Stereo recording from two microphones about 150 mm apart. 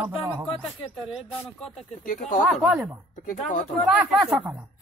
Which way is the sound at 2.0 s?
60° left (ahead or behind).